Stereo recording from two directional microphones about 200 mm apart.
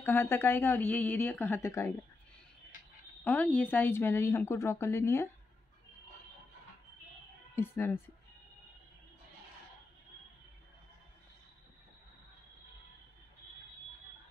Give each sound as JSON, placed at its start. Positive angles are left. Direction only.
{"t": 0.0, "sound": "speech", "side_deg": 10}
{"t": 3.3, "sound": "speech", "side_deg": 5}
{"t": 7.5, "sound": "speech", "side_deg": 10}